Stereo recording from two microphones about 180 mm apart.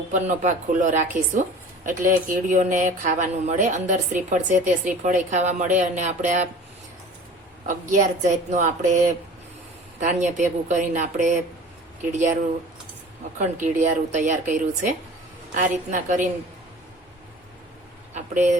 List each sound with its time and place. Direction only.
0.1 s a woman's voice: 45° right (ahead or behind)
7.7 s a woman's voice: 45° right (ahead or behind)
13.4 s a woman's voice: 45° right (ahead or behind)
18.1 s vehicle: 40° right (ahead or behind)